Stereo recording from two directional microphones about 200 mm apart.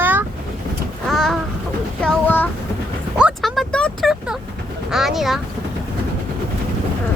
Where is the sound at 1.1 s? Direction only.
Centre (ahead or behind).